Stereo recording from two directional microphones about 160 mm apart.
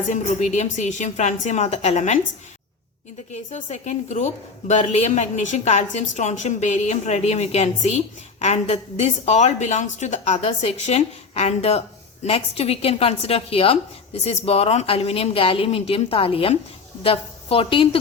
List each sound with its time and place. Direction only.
0.1 s a woman's voice: 45° left (ahead or behind)
3.3 s a woman's voice: 45° left (ahead or behind)